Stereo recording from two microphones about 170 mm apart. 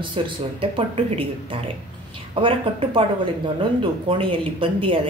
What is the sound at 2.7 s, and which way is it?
Speech, 30° right (ahead or behind).